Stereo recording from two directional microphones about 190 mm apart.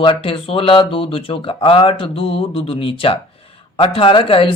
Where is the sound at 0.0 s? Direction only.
25° left (ahead or behind).